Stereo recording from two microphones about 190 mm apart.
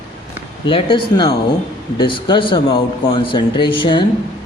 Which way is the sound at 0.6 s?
25° left (ahead or behind).